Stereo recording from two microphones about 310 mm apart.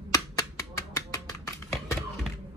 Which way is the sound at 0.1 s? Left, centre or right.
Centre.